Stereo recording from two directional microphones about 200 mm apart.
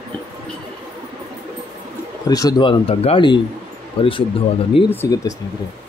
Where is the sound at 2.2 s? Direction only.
20° left (ahead or behind).